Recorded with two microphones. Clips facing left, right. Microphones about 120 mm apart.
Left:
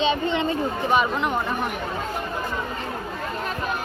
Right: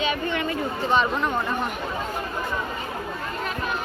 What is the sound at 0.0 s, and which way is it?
Speech, 25° left (ahead or behind).